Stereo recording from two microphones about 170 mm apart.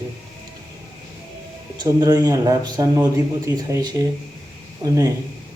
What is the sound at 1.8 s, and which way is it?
A man's voice, 25° right (ahead or behind).